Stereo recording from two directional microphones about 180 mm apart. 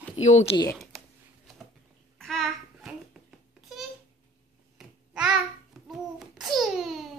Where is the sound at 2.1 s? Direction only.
Centre (ahead or behind).